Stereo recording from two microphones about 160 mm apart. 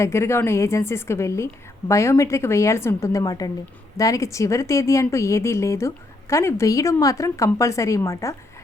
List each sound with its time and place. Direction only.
0.0 s a woman's voice: 15° left (ahead or behind)